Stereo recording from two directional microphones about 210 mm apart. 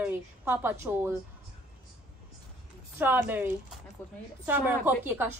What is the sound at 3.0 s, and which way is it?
A woman's voice, 10° right (ahead or behind).